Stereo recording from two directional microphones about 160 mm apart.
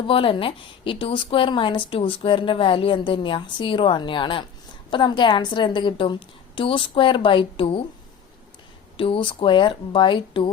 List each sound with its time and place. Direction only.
0.0 s a woman's voice: 30° left (ahead or behind)
9.0 s a woman's voice: 35° left (ahead or behind)